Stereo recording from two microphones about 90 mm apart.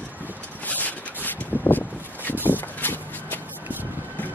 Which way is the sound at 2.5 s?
20° left (ahead or behind).